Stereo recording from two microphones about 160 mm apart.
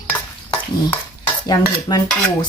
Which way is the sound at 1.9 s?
25° left (ahead or behind).